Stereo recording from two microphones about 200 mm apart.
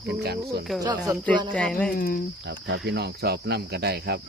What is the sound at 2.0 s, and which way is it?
Speech, 45° left (ahead or behind).